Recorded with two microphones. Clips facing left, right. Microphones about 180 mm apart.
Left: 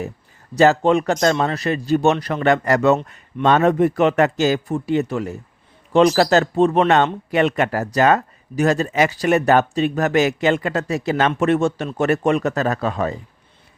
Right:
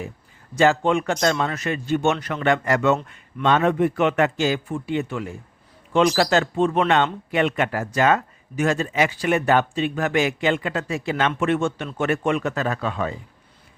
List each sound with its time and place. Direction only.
0.5 s speech: 40° left (ahead or behind)